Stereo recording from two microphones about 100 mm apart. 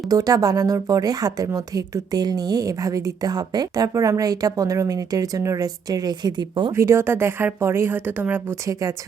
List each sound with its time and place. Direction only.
0.1 s speech: 40° right (ahead or behind)
6.7 s speech: 30° right (ahead or behind)